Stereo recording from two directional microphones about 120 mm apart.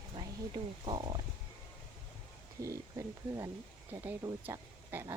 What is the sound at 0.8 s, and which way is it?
Speech, 40° right (ahead or behind).